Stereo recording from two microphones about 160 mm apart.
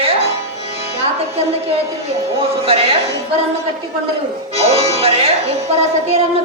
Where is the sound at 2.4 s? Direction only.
40° right (ahead or behind).